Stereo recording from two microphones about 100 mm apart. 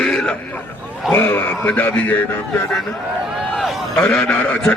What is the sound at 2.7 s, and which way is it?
Speech, centre (ahead or behind).